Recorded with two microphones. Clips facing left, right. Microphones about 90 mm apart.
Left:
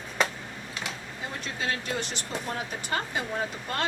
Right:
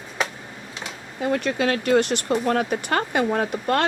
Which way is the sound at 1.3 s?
75° right (ahead or behind).